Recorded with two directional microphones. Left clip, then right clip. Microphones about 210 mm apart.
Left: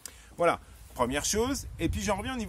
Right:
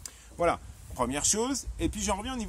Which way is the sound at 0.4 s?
10° left (ahead or behind).